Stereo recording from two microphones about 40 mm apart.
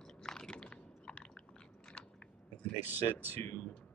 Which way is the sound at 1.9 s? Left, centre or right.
Centre.